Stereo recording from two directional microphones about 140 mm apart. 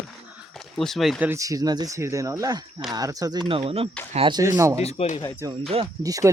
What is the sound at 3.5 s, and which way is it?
Speech, 40° right (ahead or behind).